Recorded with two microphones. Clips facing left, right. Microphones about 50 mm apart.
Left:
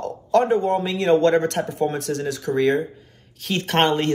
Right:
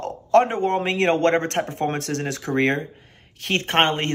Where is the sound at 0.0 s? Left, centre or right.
Right.